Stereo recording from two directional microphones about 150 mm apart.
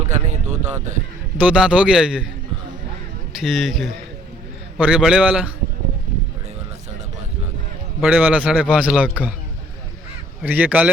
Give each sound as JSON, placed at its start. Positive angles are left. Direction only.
{"t": 0.1, "sound": "speech", "side_deg": -50}
{"t": 1.4, "sound": "a man's voice", "side_deg": -10}
{"t": 3.3, "sound": "a man's voice", "side_deg": -5}
{"t": 8.0, "sound": "a man's voice", "side_deg": -10}
{"t": 10.4, "sound": "a man's voice", "side_deg": -10}